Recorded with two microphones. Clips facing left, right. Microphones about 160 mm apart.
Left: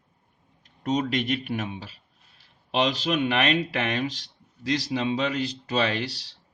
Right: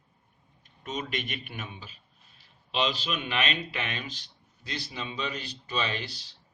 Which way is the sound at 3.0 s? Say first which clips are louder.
Left 8 dB; 85° left.